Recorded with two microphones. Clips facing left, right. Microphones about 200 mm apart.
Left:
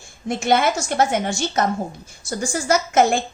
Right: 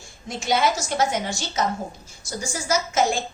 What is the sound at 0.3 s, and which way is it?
A woman's voice, 55° left (ahead or behind).